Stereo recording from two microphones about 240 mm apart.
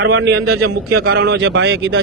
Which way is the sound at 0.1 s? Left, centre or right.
Right.